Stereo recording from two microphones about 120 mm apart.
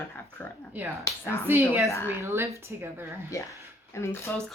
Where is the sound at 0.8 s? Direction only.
15° right (ahead or behind).